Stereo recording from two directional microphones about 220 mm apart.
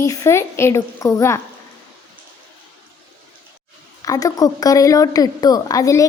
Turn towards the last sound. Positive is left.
turn(degrees=15)  # may be behind; listen again after turning